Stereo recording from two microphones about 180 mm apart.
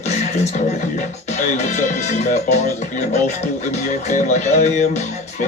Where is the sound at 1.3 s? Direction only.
45° left (ahead or behind).